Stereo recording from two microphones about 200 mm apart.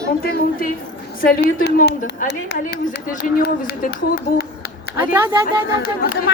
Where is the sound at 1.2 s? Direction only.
50° left (ahead or behind).